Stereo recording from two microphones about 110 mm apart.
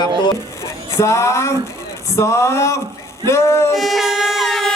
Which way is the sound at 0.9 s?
25° left (ahead or behind).